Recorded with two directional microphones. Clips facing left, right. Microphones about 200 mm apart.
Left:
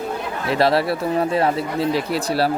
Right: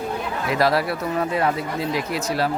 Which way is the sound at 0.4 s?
30° left (ahead or behind).